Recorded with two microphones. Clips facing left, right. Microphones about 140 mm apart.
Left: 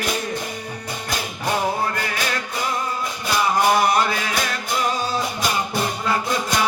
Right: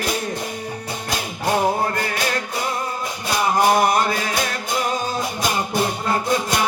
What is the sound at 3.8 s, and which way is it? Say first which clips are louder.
Mantra: right 1 dB; 45° right (ahead or behind).